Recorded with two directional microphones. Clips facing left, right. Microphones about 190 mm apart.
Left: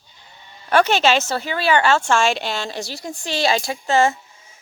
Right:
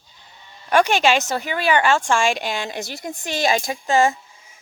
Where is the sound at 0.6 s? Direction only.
15° right (ahead or behind).